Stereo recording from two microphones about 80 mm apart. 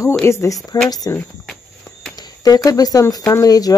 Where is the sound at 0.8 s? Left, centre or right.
Left.